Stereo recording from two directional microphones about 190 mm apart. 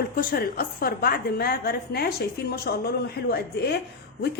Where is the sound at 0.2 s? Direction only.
50° left (ahead or behind).